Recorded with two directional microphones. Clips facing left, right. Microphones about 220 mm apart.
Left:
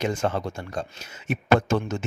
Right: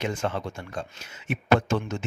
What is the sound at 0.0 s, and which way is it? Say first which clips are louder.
A man's voice: left 3 dB; 40° left (ahead or behind).